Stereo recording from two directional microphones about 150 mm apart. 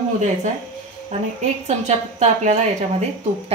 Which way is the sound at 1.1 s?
50° right (ahead or behind).